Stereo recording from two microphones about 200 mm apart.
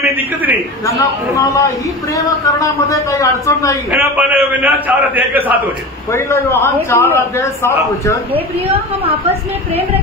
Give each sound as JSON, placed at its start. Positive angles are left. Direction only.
{"t": 0.0, "sound": "a man's voice", "side_deg": -10}
{"t": 0.8, "sound": "a man's voice", "side_deg": 15}
{"t": 3.9, "sound": "a man's voice", "side_deg": -10}
{"t": 6.1, "sound": "a man's voice", "side_deg": 10}